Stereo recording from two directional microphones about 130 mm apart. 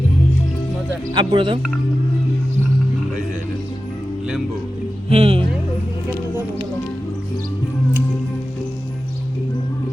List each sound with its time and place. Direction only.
1.1 s speech: 40° right (ahead or behind)
5.0 s music: 45° right (ahead or behind)